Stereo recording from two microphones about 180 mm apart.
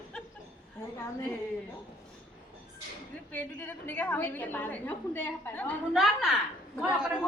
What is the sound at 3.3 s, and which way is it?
Speech, 10° left (ahead or behind).